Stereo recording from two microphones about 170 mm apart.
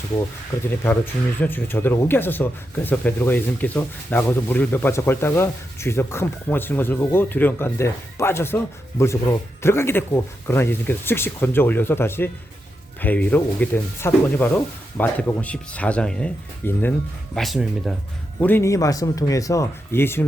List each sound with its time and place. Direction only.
0.9 s speech: 10° left (ahead or behind)
18.3 s speech: 10° left (ahead or behind)